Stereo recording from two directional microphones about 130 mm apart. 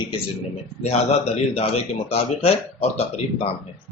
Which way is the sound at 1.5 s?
50° left (ahead or behind).